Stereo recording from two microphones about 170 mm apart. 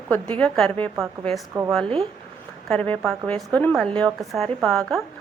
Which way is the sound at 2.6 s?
5° left (ahead or behind).